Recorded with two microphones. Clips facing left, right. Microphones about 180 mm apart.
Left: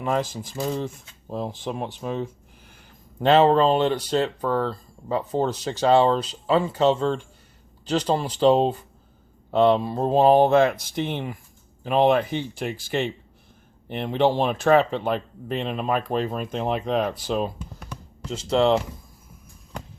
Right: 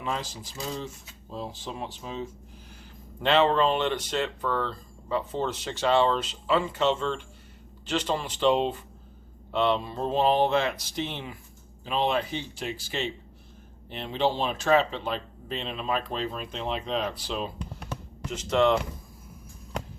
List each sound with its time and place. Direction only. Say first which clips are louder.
0.0 s speech: left 8 dB; 50° left (ahead or behind)
3.2 s speech: left 5 dB; 40° left (ahead or behind)
18.3 s speech: left 3 dB; 30° left (ahead or behind)